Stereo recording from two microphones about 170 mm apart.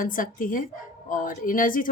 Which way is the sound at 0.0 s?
55° left (ahead or behind).